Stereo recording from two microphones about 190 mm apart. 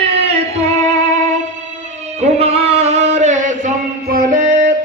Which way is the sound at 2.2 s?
35° right (ahead or behind).